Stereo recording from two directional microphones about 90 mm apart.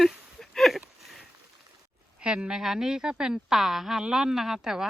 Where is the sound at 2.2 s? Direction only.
10° right (ahead or behind).